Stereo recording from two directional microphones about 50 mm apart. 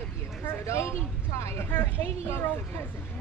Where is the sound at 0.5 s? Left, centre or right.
Left.